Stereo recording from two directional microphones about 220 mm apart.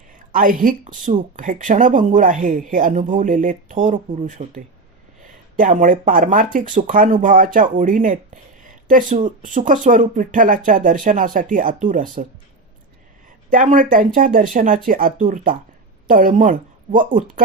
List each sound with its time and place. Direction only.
0.3 s speech: 40° right (ahead or behind)
13.5 s speech: 35° right (ahead or behind)